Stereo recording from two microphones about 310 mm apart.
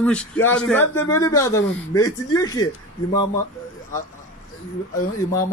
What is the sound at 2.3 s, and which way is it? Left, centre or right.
Speech, centre.